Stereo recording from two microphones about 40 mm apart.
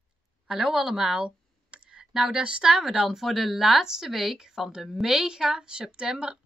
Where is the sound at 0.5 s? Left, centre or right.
Centre.